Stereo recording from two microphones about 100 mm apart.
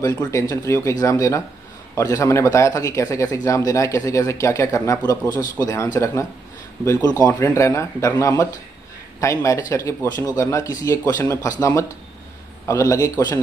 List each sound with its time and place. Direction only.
0.3 s speech: 30° left (ahead or behind)
7.0 s speech: 45° left (ahead or behind)
7.3 s speech: 30° left (ahead or behind)
12.6 s speech: 30° left (ahead or behind)